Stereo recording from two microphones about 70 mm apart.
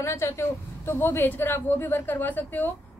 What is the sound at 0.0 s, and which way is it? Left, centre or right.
A woman's voice, left.